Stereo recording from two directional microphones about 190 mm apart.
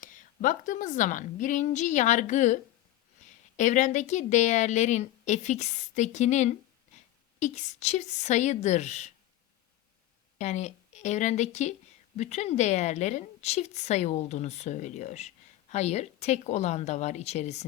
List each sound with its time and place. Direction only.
0.0 s a woman's voice: 45° left (ahead or behind)
3.6 s a woman's voice: 40° left (ahead or behind)
10.3 s a woman's voice: 35° left (ahead or behind)